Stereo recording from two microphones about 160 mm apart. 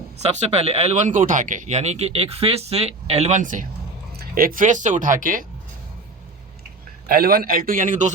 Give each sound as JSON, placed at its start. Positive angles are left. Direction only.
{"t": 0.2, "sound": "speech", "side_deg": -40}
{"t": 7.1, "sound": "speech", "side_deg": -70}